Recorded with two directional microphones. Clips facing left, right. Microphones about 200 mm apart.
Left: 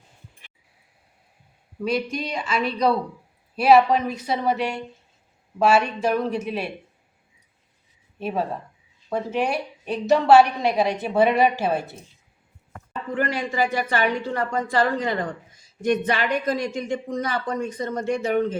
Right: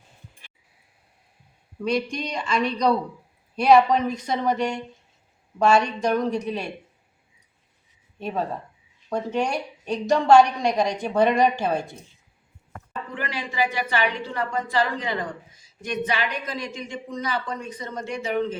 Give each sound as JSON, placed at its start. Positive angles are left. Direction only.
{"t": 1.8, "sound": "a woman's voice", "side_deg": 5}
{"t": 8.2, "sound": "a woman's voice", "side_deg": 5}
{"t": 13.1, "sound": "a woman's voice", "side_deg": 50}